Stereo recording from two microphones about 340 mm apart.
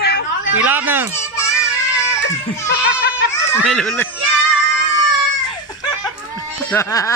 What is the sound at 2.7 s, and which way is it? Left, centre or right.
Goat, left.